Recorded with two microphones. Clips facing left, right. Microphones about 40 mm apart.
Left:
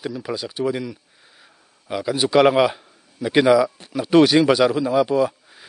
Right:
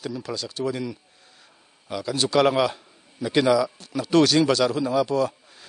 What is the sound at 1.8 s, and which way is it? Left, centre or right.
A man's voice, centre.